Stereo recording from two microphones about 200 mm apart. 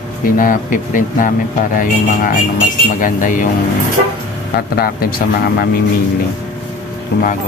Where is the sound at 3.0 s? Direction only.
40° left (ahead or behind).